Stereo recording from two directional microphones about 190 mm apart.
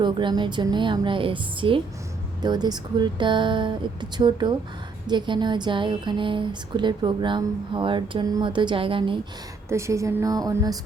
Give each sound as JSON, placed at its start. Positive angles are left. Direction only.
{"t": 0.0, "sound": "speech", "side_deg": -25}
{"t": 9.6, "sound": "a woman's voice", "side_deg": -15}